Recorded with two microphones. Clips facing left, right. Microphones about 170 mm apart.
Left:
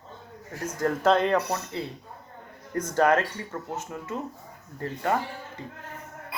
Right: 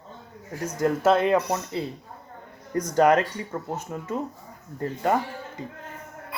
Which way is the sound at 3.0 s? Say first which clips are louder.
Right 3 dB; 15° right (ahead or behind).